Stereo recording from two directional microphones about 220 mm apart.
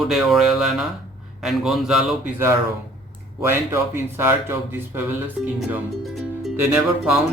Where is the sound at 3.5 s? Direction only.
10° right (ahead or behind).